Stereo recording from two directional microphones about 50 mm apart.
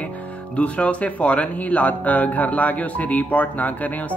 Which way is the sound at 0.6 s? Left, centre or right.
Left.